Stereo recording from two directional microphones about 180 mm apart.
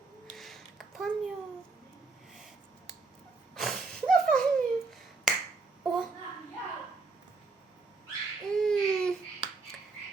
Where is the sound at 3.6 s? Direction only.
Centre (ahead or behind).